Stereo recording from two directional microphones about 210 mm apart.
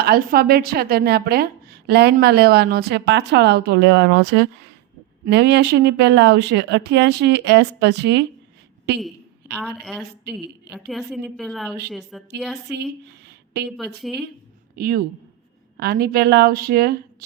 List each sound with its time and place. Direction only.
0.0 s speech: 45° right (ahead or behind)
9.6 s a woman's voice: centre (ahead or behind)
13.1 s a sound: 50° right (ahead or behind)
13.7 s a woman's voice: centre (ahead or behind)
14.8 s speech: 45° right (ahead or behind)